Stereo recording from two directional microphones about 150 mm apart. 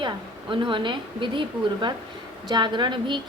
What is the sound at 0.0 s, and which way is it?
A woman's voice, 35° right (ahead or behind).